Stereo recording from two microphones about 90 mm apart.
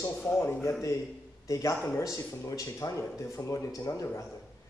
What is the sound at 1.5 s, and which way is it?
A man's voice, 35° left (ahead or behind).